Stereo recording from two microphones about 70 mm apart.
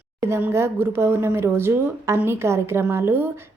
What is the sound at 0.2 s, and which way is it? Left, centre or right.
A woman's voice, right.